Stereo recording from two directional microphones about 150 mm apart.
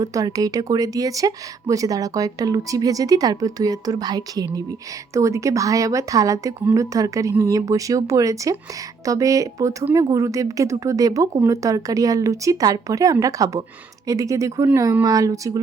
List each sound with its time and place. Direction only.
0.0 s speech: 25° right (ahead or behind)